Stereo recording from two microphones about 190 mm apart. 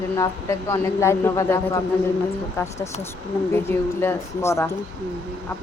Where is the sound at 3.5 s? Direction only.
10° left (ahead or behind).